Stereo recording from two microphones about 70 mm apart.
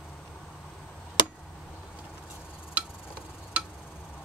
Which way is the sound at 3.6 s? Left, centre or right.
Right.